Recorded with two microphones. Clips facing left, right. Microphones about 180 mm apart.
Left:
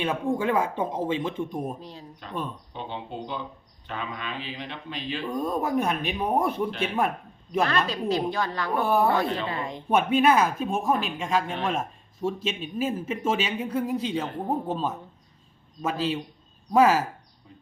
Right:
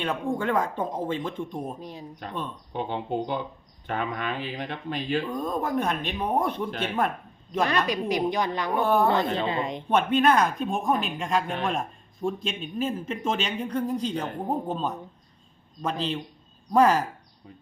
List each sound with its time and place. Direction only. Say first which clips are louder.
0.0 s speech: left 2 dB; 5° left (ahead or behind)
1.8 s a woman's voice: right 3 dB; 15° right (ahead or behind)
2.7 s speech: right 8 dB; 50° right (ahead or behind)
5.3 s speech: left 1 dB; 10° left (ahead or behind)
7.9 s a woman's voice: right 1 dB; 15° right (ahead or behind)
8.8 s speech: even; 5° left (ahead or behind)
9.1 s speech: right 1 dB; 25° right (ahead or behind)
9.9 s speech: left 1 dB; 10° left (ahead or behind)